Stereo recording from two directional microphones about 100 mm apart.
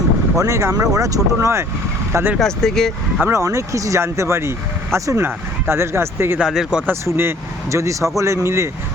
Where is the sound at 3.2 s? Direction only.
30° right (ahead or behind).